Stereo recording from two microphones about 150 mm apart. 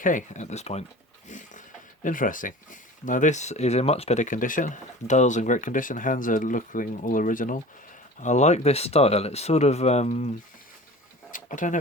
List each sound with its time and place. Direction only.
0.0 s speech: 60° left (ahead or behind)
1.3 s a sound: 55° left (ahead or behind)
2.0 s speech: 65° left (ahead or behind)
8.2 s speech: 50° left (ahead or behind)
11.3 s speech: 60° left (ahead or behind)